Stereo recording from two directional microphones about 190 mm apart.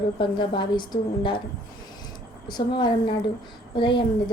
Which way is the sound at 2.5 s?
25° left (ahead or behind).